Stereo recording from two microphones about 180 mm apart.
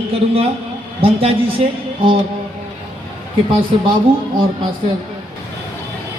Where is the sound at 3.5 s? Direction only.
25° right (ahead or behind).